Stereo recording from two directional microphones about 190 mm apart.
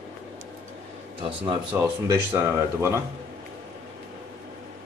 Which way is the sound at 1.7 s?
10° right (ahead or behind).